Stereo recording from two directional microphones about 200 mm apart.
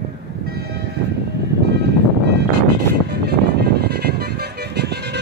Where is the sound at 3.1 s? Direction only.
55° right (ahead or behind).